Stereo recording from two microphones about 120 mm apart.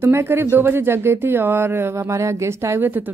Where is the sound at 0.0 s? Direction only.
20° right (ahead or behind).